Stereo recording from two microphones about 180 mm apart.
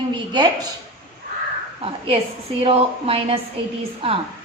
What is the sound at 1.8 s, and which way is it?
A woman's voice, 35° right (ahead or behind).